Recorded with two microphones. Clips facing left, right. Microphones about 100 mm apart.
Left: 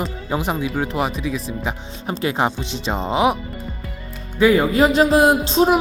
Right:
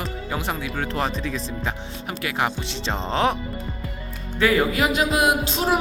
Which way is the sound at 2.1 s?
25° left (ahead or behind).